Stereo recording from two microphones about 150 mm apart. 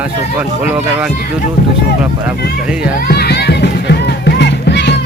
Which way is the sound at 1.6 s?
85° left.